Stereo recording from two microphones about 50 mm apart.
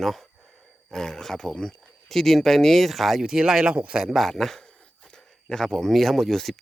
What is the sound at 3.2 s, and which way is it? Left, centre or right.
Speech, centre.